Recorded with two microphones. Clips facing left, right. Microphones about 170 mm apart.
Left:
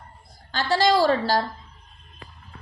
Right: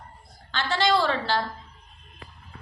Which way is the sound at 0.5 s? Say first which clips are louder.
Left 3 dB; 40° left (ahead or behind).